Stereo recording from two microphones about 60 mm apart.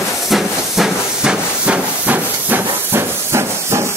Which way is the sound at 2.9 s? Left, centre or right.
Right.